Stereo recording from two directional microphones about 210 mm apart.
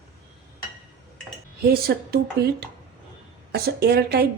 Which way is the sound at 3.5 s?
50° right (ahead or behind).